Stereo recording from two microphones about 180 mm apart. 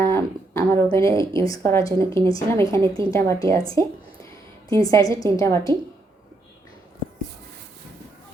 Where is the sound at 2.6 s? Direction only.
25° right (ahead or behind).